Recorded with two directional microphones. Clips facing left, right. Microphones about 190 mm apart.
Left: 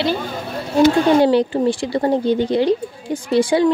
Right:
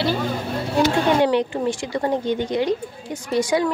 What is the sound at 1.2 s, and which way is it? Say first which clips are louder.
Speech: left 4 dB; 35° left (ahead or behind).